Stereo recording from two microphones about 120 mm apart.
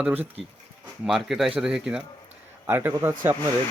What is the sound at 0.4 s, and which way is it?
Speech, centre (ahead or behind).